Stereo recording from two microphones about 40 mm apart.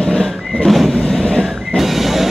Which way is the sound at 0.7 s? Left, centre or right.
Centre.